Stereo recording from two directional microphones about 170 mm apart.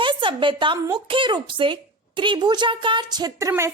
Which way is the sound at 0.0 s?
30° right (ahead or behind).